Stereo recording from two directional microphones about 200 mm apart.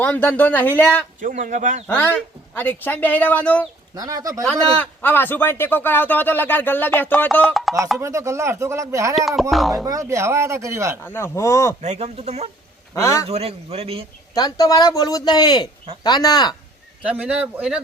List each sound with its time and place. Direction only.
0.0 s a man's voice: 10° left (ahead or behind)
1.2 s a man's voice: 40° right (ahead or behind)
1.9 s a man's voice: 10° left (ahead or behind)
3.9 s speech: 20° right (ahead or behind)
4.4 s a man's voice: 5° left (ahead or behind)
7.9 s speech: 15° right (ahead or behind)
9.1 s speech: centre (ahead or behind)
9.8 s speech: 15° right (ahead or behind)
11.0 s a man's voice: 10° left (ahead or behind)
11.8 s a man's voice: 35° right (ahead or behind)
12.9 s a man's voice: 15° left (ahead or behind)
13.2 s a man's voice: 30° right (ahead or behind)
14.3 s speech: 20° left (ahead or behind)
17.0 s speech: 5° right (ahead or behind)